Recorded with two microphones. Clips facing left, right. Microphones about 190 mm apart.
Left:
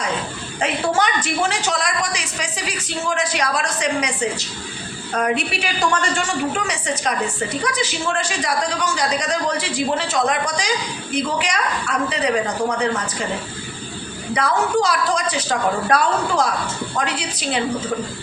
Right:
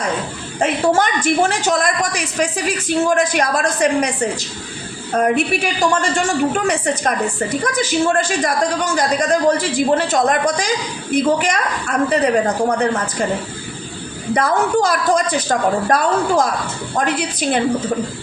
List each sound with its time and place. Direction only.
0.6 s a woman's voice: 50° right (ahead or behind)
14.3 s a woman's voice: 50° right (ahead or behind)